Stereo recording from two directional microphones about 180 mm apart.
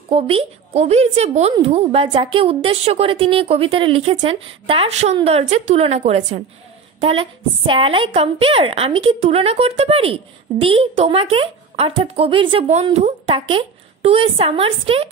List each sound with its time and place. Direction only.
0.1 s a woman's voice: 30° right (ahead or behind)